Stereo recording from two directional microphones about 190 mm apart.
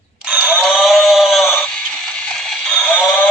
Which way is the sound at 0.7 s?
Centre (ahead or behind).